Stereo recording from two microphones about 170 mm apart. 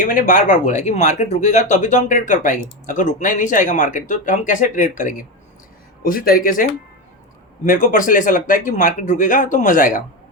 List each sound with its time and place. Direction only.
0.0 s a man's voice: 55° left (ahead or behind)